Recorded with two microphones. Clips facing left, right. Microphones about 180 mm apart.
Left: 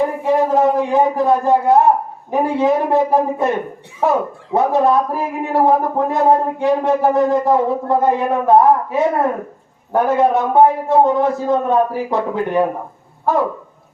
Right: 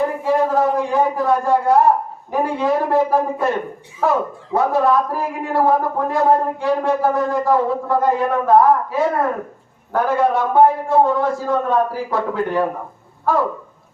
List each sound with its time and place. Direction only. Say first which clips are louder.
0.3 s a man's voice: left 3 dB; 20° left (ahead or behind)